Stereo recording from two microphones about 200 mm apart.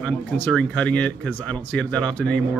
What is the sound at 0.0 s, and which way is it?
Speech, 5° left (ahead or behind).